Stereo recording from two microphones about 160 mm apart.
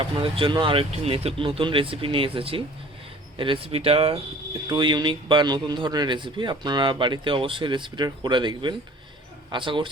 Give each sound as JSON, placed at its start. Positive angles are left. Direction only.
{"t": 0.0, "sound": "speech", "side_deg": -35}